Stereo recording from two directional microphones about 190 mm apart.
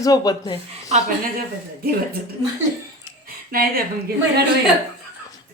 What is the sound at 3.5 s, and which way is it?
Speech, 50° right (ahead or behind).